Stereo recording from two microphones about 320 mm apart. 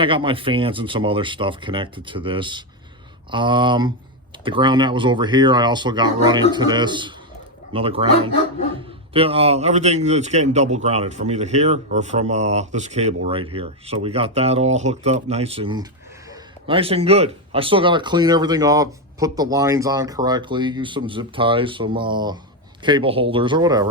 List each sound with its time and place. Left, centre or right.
0.0 s speech: centre